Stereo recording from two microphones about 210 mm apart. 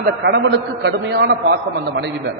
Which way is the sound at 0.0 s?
55° right (ahead or behind).